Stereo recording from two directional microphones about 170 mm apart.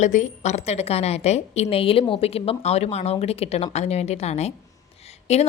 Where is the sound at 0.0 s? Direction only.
45° left (ahead or behind).